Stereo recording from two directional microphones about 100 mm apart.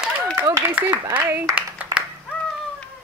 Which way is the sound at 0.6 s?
20° right (ahead or behind).